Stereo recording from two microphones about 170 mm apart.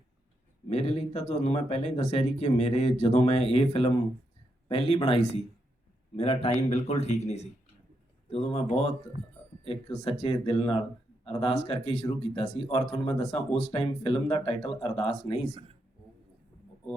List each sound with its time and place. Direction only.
0.7 s speech: 40° left (ahead or behind)